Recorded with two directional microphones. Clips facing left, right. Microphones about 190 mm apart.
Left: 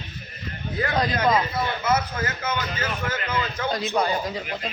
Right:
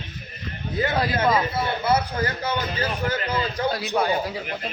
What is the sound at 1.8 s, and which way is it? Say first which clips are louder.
A man's voice: right 3 dB; 30° right (ahead or behind).